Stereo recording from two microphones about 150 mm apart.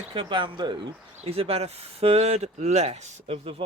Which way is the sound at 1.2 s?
40° right (ahead or behind).